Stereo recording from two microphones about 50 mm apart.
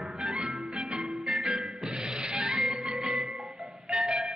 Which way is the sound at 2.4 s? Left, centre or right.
Centre.